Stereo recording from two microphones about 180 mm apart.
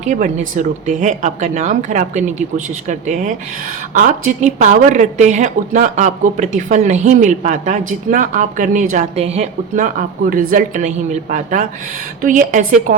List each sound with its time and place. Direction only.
0.0 s a woman's voice: 40° right (ahead or behind)